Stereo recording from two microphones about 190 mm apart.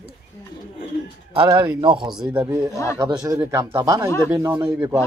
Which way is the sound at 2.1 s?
5° right (ahead or behind).